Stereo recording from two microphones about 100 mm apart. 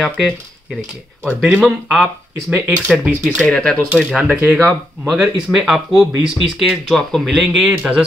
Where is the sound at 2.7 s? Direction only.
Centre (ahead or behind).